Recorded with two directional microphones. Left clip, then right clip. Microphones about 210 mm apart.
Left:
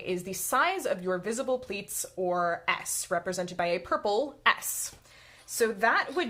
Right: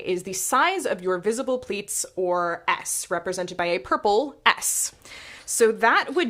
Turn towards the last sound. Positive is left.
turn(degrees=-35)  # may be behind; listen again after turning